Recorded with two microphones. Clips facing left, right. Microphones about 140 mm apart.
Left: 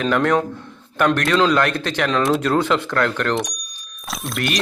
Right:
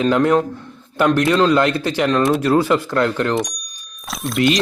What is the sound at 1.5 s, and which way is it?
Speech, 10° right (ahead or behind).